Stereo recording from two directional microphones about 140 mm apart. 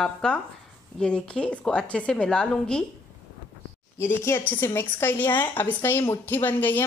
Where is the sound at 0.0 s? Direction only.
5° left (ahead or behind).